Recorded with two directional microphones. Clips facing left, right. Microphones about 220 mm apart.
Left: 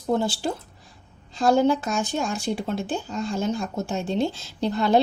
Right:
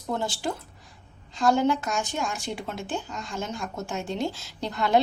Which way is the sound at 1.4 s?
35° left (ahead or behind).